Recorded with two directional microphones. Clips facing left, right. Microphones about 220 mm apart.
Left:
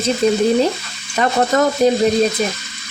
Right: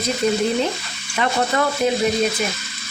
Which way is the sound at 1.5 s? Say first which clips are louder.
Left 7 dB; 40° left (ahead or behind).